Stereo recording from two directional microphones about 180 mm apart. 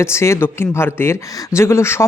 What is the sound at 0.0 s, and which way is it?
Speech, 15° left (ahead or behind).